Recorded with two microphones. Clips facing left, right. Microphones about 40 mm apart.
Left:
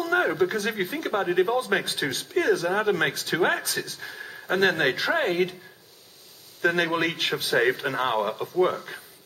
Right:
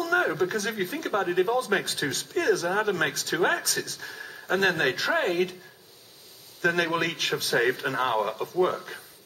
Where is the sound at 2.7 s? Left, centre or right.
Centre.